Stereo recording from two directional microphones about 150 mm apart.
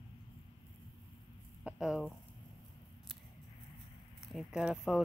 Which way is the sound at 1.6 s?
5° right (ahead or behind).